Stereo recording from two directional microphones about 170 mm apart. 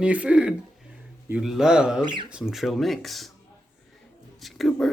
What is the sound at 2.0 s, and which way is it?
Speech, 30° right (ahead or behind).